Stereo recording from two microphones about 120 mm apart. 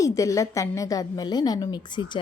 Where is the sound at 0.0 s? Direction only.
25° left (ahead or behind).